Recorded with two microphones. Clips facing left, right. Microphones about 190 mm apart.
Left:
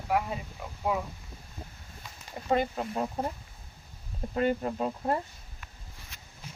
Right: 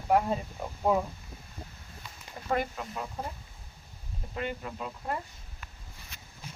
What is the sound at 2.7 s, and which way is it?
Speech, 35° left (ahead or behind).